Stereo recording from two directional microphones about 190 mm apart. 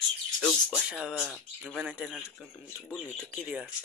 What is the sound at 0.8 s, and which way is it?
Speech, 5° right (ahead or behind).